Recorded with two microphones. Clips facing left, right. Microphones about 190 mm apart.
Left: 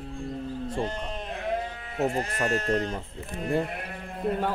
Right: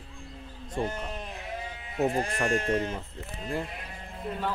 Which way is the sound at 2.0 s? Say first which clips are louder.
Even; 15° right (ahead or behind).